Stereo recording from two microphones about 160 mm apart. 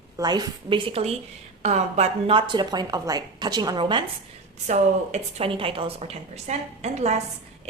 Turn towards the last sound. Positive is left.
turn(degrees=-45)  # may be behind; listen again after turning